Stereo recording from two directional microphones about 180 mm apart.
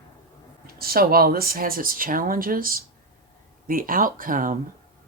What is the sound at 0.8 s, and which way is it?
Speech, 55° right (ahead or behind).